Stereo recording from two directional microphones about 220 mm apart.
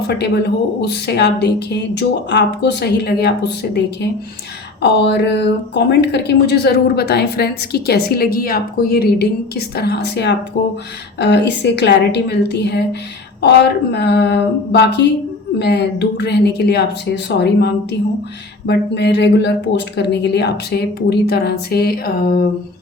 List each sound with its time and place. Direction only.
0.2 s a woman's voice: 50° left (ahead or behind)